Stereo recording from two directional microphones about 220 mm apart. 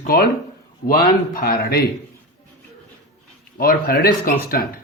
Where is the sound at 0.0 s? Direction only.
40° left (ahead or behind).